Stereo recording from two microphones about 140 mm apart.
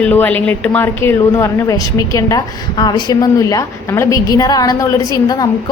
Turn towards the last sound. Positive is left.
turn(degrees=25)  # may be behind; listen again after turning